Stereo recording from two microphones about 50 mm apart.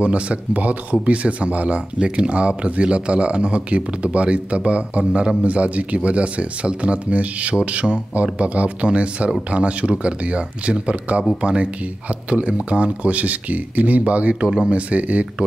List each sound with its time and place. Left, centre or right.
0.0 s speech: right